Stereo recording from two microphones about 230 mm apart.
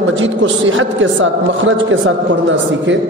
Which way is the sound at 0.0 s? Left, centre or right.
Right.